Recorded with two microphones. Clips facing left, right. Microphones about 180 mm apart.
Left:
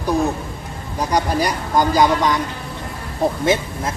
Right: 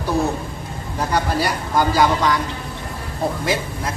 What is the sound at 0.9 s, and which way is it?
Speech, 15° left (ahead or behind).